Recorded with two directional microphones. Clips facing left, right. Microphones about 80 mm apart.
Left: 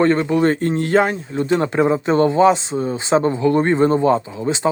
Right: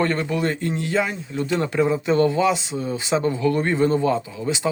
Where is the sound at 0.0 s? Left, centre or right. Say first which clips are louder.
Left 7 dB; left.